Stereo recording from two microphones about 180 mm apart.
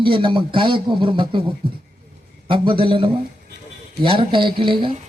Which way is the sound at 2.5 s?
30° right (ahead or behind).